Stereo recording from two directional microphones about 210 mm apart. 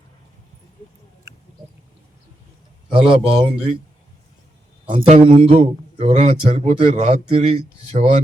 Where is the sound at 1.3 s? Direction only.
15° right (ahead or behind).